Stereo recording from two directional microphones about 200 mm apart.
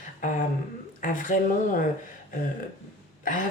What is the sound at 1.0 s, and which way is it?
Speech, 40° left (ahead or behind).